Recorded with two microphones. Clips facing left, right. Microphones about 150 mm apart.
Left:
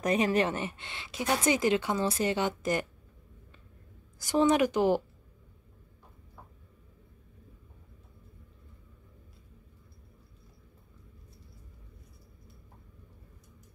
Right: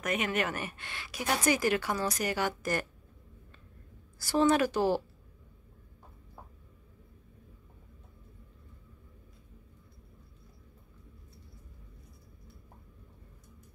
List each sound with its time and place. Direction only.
0.0 s a woman's voice: 35° left (ahead or behind)
4.2 s a woman's voice: 20° left (ahead or behind)